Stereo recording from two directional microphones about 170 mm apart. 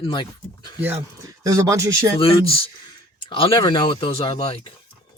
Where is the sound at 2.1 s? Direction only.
30° left (ahead or behind).